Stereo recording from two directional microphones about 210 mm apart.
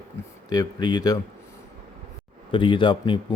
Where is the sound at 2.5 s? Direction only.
25° left (ahead or behind).